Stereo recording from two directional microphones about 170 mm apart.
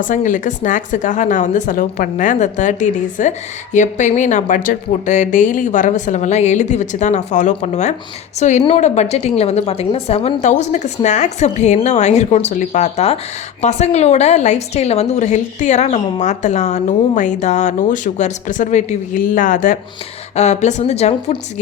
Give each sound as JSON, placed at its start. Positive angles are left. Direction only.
{"t": 0.0, "sound": "a woman's voice", "side_deg": 50}